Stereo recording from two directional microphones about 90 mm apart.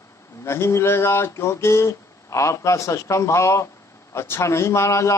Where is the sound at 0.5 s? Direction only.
30° left (ahead or behind).